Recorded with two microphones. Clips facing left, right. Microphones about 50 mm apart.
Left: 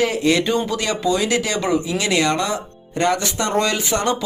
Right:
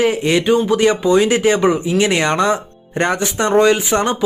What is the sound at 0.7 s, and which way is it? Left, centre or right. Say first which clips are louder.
Speech: right 7 dB; right.